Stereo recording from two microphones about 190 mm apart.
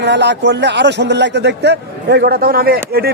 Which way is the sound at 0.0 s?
65° right (ahead or behind).